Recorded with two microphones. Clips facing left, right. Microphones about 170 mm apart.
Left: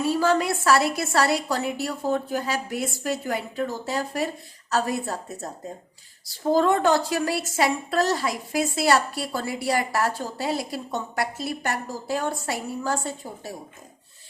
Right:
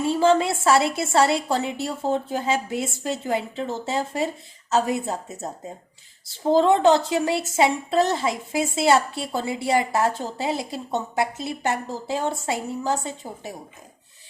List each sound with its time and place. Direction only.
0.0 s a woman's voice: 25° right (ahead or behind)